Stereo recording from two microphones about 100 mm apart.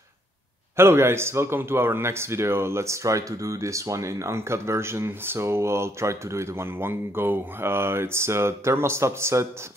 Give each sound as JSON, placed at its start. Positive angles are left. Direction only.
{"t": 0.7, "sound": "speech", "side_deg": -25}